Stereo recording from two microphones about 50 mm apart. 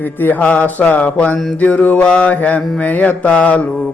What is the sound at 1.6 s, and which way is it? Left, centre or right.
Mantra, left.